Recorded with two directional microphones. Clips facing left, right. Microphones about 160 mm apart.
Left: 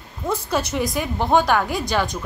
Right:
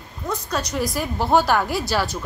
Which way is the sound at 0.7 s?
Centre (ahead or behind).